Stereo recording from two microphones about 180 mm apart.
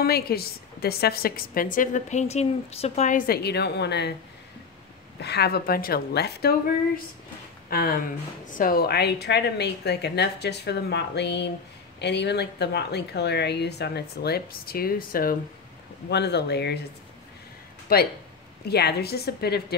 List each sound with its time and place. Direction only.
0.0 s a woman's voice: 60° left (ahead or behind)
5.2 s a woman's voice: 65° left (ahead or behind)
7.7 s a woman's voice: 55° left (ahead or behind)
16.1 s speech: 70° left (ahead or behind)
17.9 s a woman's voice: 60° left (ahead or behind)